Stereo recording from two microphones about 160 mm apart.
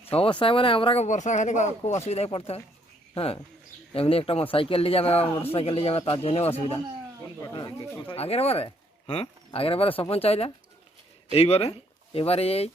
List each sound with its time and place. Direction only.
0.0 s speech: 35° left (ahead or behind)